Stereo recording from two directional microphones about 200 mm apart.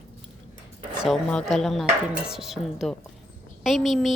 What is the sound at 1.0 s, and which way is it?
A woman's voice, centre (ahead or behind).